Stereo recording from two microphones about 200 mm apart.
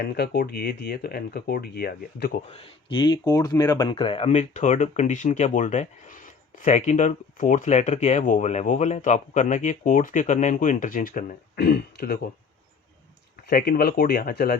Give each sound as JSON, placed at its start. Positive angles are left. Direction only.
{"t": 0.0, "sound": "speech", "side_deg": 55}
{"t": 2.5, "sound": "speech", "side_deg": 30}
{"t": 13.5, "sound": "speech", "side_deg": 50}